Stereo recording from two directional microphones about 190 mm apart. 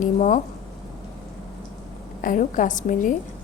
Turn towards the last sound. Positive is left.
turn(degrees=40)  # may be behind; listen again after turning